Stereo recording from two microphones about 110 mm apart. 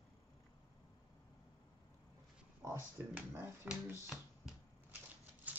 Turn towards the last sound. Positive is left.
turn(degrees=-15)  # may be behind; listen again after turning